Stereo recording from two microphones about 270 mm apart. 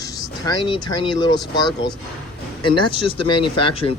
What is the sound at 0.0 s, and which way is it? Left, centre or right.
A man's voice, centre.